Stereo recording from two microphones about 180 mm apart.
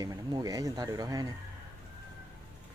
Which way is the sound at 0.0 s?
20° right (ahead or behind).